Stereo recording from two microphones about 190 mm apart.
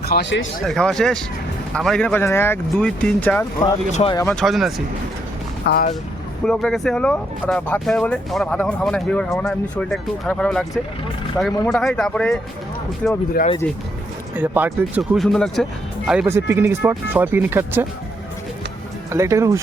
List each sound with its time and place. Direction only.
0.0 s speech: 60° left (ahead or behind)
0.6 s speech: centre (ahead or behind)
4.4 s speech: centre (ahead or behind)
5.6 s speech: 55° left (ahead or behind)
6.4 s speech: 5° left (ahead or behind)
14.3 s speech: 10° right (ahead or behind)
19.1 s speech: 15° right (ahead or behind)